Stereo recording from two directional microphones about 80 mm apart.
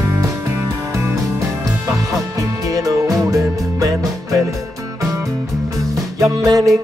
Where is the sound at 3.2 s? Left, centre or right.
Right.